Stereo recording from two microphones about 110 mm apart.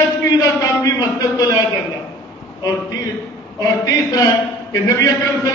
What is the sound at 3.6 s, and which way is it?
A man's voice, 35° left (ahead or behind).